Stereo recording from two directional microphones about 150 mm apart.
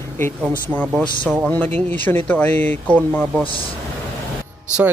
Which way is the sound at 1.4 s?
10° left (ahead or behind).